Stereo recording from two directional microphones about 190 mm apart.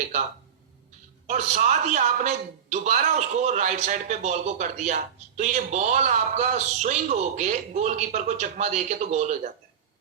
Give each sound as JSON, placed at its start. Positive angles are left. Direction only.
{"t": 1.3, "sound": "a man's voice", "side_deg": -40}